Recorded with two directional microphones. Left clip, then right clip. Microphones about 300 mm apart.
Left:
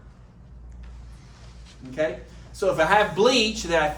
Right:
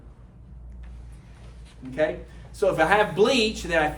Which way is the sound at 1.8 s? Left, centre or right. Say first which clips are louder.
Right 2 dB; right.